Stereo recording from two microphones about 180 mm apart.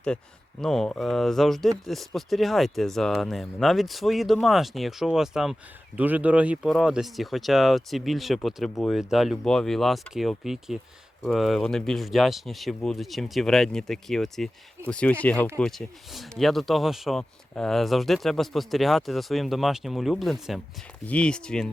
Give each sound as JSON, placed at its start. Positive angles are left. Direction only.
{"t": 0.6, "sound": "speech", "side_deg": 0}